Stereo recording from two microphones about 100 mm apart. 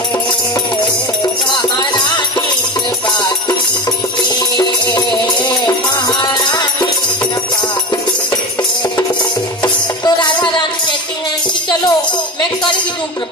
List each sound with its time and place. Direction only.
1.5 s music: 50° left (ahead or behind)
10.0 s music: 50° left (ahead or behind)